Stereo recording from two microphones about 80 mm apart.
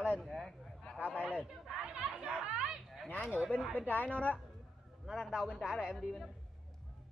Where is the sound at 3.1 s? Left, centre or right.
Left.